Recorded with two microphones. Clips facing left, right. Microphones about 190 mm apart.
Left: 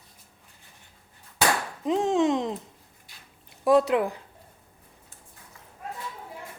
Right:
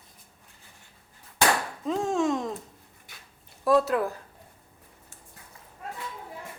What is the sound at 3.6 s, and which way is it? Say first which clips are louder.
Speech: left 2 dB; 15° left (ahead or behind).